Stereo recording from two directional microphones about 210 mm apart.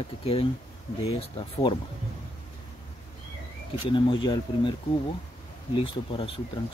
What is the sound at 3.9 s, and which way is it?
Speech, 25° left (ahead or behind).